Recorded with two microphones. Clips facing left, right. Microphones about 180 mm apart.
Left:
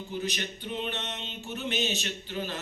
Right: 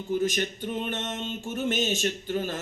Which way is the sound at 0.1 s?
45° right (ahead or behind).